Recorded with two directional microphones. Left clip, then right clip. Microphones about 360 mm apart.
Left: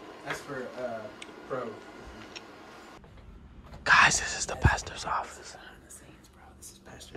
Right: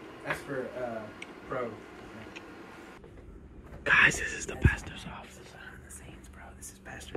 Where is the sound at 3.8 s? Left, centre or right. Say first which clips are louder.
Left 2 dB; centre.